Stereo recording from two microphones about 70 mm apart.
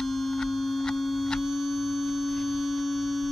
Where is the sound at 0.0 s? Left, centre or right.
Centre.